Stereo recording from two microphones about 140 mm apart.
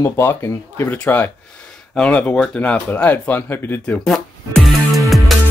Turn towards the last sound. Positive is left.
turn(degrees=0)  # may be behind; listen again after turning